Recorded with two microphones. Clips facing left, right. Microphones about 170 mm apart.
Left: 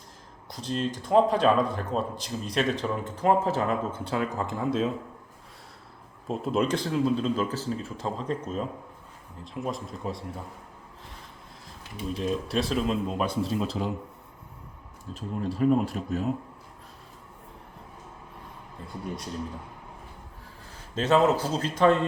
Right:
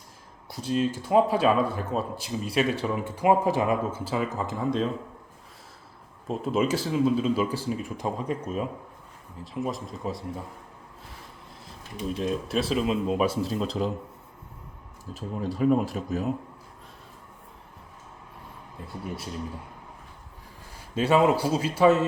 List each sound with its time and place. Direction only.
0.5 s speech: 5° right (ahead or behind)
6.2 s speech: centre (ahead or behind)
12.1 s speech: centre (ahead or behind)
15.1 s speech: centre (ahead or behind)
19.0 s speech: 5° right (ahead or behind)
20.9 s speech: 10° right (ahead or behind)